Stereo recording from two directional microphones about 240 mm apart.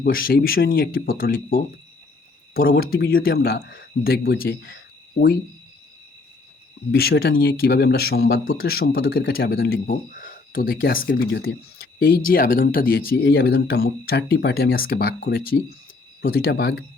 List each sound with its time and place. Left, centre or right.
0.0 s speech: left
6.9 s speech: left